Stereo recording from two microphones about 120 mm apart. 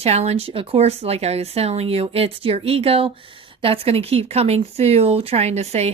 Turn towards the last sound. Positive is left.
turn(degrees=-65)  # may be behind; listen again after turning